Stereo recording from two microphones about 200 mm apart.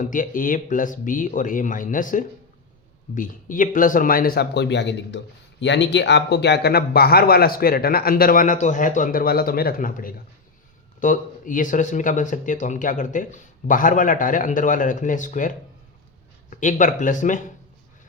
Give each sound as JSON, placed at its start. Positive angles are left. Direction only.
{"t": 0.0, "sound": "speech", "side_deg": 40}